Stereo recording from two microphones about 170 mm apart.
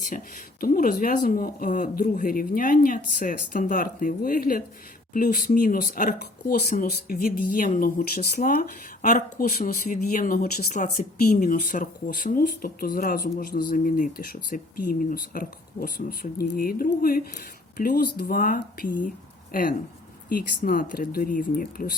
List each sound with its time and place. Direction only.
0.6 s speech: 55° left (ahead or behind)